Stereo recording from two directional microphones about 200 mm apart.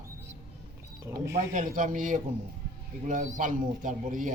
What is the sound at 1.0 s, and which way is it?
Speech, 15° right (ahead or behind).